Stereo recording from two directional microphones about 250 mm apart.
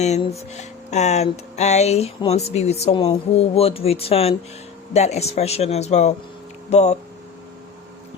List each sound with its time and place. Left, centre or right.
0.0 s music: left